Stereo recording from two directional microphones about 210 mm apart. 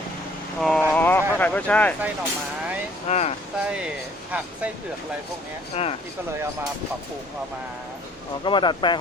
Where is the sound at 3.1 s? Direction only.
30° left (ahead or behind).